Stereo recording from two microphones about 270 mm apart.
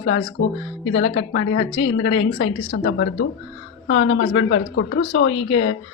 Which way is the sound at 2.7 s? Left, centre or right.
Left.